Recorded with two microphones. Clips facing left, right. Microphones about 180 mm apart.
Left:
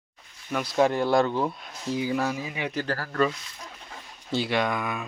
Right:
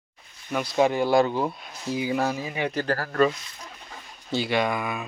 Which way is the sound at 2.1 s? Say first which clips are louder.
Right 2 dB; 30° right (ahead or behind).